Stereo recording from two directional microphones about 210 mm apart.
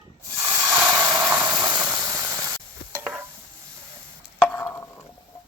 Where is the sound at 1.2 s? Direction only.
10° right (ahead or behind).